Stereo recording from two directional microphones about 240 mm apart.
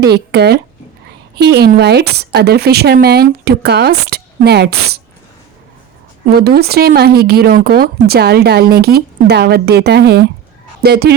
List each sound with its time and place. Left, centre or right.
0.0 s speech: right
6.3 s speech: right